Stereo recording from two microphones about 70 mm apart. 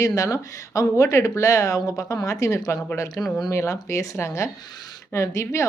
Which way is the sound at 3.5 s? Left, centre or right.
Left.